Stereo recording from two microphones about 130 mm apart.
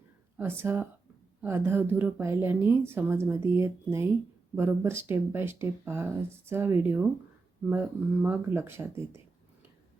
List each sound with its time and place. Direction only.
0.3 s a woman's voice: 15° right (ahead or behind)